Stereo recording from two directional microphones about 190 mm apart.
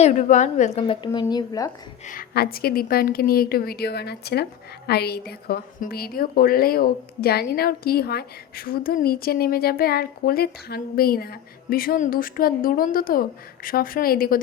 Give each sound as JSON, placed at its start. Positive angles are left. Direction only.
{"t": 0.0, "sound": "a woman's voice", "side_deg": 40}
{"t": 2.0, "sound": "a woman's voice", "side_deg": 50}